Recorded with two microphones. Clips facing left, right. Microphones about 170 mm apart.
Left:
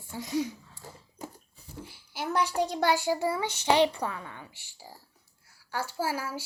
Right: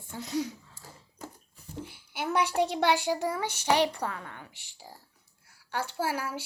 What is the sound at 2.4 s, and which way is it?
Speech, 70° right (ahead or behind).